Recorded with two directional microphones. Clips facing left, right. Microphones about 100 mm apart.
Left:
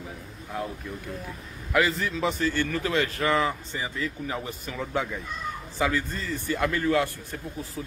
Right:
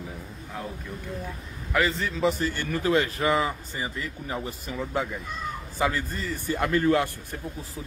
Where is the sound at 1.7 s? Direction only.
Centre (ahead or behind).